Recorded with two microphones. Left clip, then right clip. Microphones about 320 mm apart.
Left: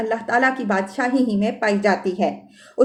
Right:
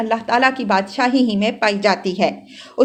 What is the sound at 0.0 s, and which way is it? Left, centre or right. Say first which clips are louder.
Speech: right 3 dB; centre.